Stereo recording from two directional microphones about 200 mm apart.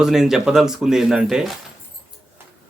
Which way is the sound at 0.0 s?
Centre (ahead or behind).